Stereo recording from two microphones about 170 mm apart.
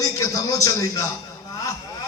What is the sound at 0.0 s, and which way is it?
A man's voice, 20° left (ahead or behind).